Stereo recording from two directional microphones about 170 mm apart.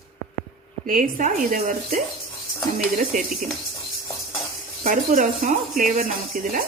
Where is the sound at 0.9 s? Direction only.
50° right (ahead or behind).